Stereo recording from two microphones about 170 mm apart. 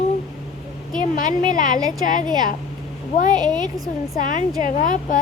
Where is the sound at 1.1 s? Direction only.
50° left (ahead or behind).